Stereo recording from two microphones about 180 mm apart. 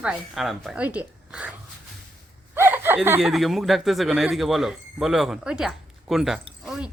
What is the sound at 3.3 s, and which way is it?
A woman's voice, centre (ahead or behind).